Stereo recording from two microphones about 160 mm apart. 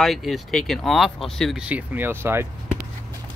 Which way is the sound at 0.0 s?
Centre (ahead or behind).